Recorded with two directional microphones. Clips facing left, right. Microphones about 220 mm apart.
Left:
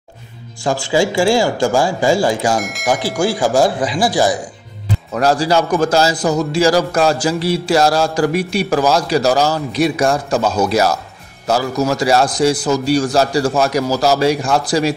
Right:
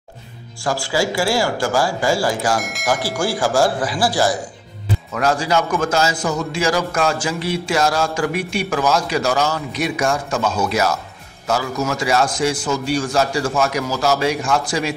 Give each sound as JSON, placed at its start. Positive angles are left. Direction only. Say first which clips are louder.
{"t": 0.7, "sound": "speech", "louder": "left 4 dB", "side_deg": 25}
{"t": 2.6, "sound": "speech", "louder": "left 3 dB", "side_deg": 0}
{"t": 3.2, "sound": "speech", "louder": "left 4 dB", "side_deg": 20}
{"t": 5.1, "sound": "a man's voice", "louder": "left 4 dB", "side_deg": 35}